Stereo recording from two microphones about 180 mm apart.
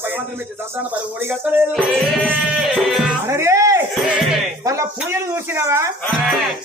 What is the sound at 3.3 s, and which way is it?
Speech, 15° right (ahead or behind).